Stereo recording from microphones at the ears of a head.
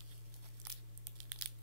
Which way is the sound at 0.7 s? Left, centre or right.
Right.